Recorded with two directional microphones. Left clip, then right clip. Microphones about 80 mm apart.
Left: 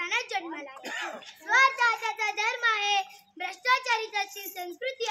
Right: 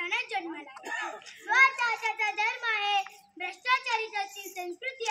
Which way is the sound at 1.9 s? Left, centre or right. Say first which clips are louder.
Even; left.